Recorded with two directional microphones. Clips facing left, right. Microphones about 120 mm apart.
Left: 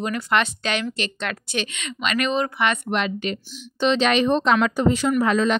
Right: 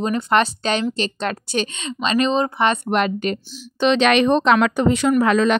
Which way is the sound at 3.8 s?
70° right (ahead or behind).